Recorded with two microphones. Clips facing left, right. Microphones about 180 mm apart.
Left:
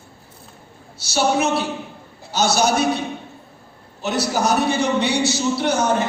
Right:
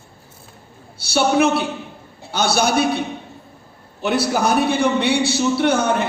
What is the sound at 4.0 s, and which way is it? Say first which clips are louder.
A man's voice: right 2 dB; 60° right (ahead or behind).